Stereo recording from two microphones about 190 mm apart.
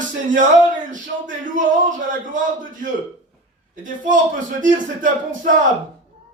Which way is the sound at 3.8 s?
45° right (ahead or behind).